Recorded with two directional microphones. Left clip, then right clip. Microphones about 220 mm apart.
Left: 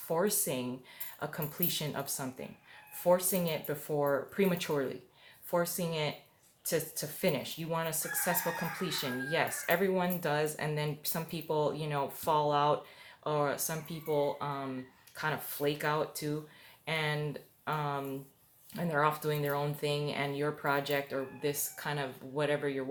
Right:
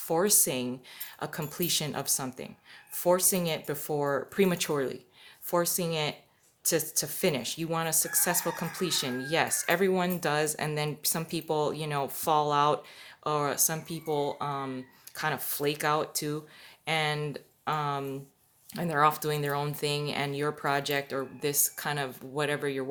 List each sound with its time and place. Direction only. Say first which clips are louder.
0.1 s speech: right 5 dB; 50° right (ahead or behind)